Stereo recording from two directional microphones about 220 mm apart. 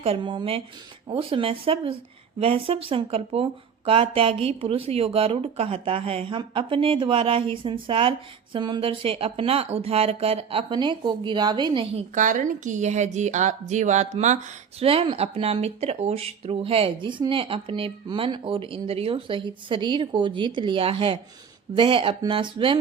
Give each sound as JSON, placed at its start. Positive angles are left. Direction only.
{"t": 0.0, "sound": "speech", "side_deg": -25}